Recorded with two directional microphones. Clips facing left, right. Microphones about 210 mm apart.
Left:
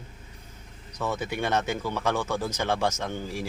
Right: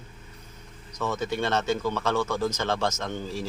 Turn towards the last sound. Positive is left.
turn(degrees=15)  # may be behind; listen again after turning